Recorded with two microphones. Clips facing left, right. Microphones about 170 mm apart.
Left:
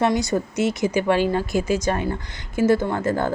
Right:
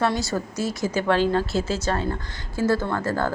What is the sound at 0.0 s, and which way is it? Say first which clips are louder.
Speech: left 3 dB; 20° left (ahead or behind).